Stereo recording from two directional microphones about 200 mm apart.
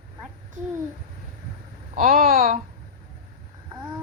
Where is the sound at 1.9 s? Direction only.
45° right (ahead or behind).